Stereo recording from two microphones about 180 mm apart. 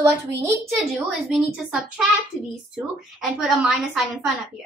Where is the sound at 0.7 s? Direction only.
Centre (ahead or behind).